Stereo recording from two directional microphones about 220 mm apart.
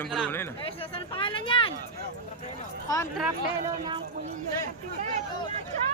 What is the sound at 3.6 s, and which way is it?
Speech, 20° right (ahead or behind).